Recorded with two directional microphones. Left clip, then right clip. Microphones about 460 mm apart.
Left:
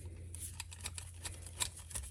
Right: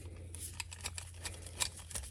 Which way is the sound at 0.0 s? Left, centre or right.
Centre.